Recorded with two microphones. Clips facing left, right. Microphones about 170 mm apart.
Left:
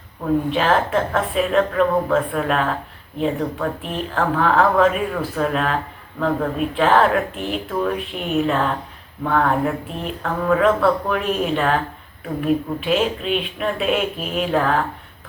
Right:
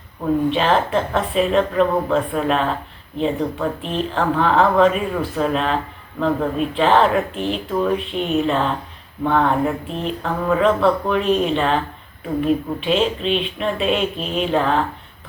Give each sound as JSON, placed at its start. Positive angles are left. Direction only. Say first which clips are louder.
{"t": 0.5, "sound": "speech", "louder": "right 1 dB", "side_deg": 0}